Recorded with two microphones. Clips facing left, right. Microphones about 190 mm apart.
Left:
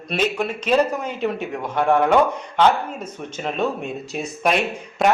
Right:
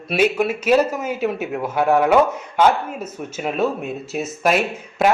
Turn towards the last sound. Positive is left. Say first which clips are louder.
# right 1 dB
turn(degrees=-5)  # may be behind; listen again after turning